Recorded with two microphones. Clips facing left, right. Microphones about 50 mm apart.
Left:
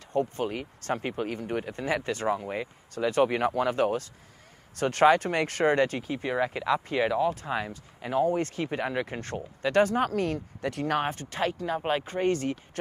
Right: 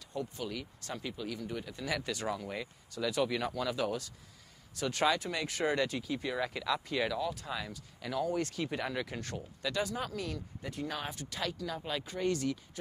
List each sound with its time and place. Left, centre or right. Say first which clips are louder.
0.1 s speech: left 10 dB; left
3.0 s speech: left 8 dB; left
10.7 s speech: left 9 dB; left
11.0 s speech: left 10 dB; left